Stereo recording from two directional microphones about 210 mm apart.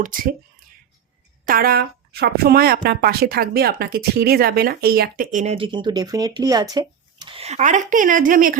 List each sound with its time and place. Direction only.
0.0 s speech: 40° right (ahead or behind)
1.5 s speech: 45° right (ahead or behind)